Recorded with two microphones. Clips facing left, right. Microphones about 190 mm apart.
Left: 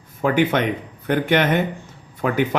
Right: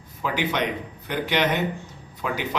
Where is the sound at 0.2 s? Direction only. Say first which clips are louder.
Left 7 dB; 55° left (ahead or behind).